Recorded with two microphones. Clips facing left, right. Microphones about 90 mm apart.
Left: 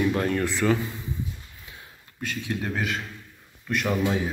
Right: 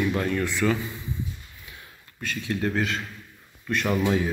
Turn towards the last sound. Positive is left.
turn(degrees=5)  # may be behind; listen again after turning